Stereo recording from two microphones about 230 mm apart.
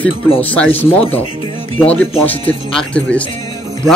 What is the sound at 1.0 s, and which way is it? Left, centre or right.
Speech, left.